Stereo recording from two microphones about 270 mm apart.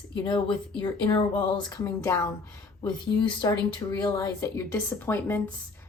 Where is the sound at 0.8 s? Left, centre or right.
Centre.